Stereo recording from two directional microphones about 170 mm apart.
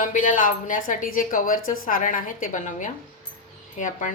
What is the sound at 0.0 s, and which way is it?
Speech, 50° left (ahead or behind).